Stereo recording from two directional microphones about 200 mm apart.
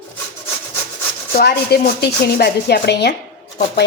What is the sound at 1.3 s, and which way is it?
Speech, 50° left (ahead or behind).